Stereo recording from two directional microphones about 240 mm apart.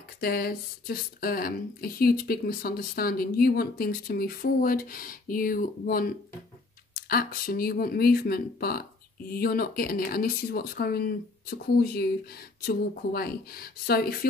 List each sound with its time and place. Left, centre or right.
0.2 s speech: left